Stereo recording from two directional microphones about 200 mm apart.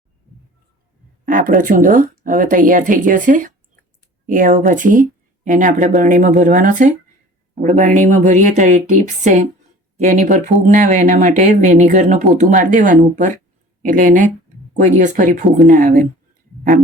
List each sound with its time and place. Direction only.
1.2 s speech: 40° right (ahead or behind)